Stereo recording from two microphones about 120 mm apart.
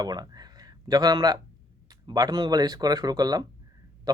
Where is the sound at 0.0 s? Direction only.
35° right (ahead or behind).